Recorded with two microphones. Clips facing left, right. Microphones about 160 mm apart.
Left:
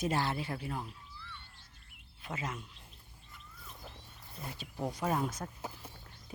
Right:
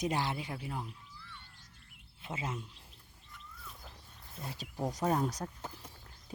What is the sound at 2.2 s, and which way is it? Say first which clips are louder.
Speech: even; 25° right (ahead or behind).